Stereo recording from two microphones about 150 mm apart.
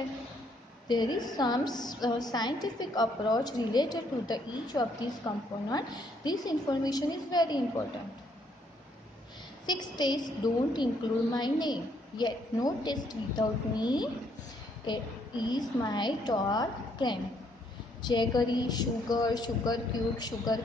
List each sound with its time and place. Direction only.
0.8 s a woman's voice: 30° left (ahead or behind)
9.7 s a woman's voice: 30° left (ahead or behind)